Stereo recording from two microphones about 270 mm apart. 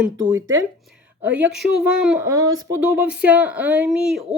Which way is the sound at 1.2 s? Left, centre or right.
Centre.